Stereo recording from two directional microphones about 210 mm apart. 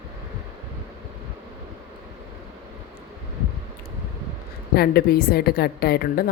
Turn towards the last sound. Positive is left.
turn(degrees=45)  # may be behind; listen again after turning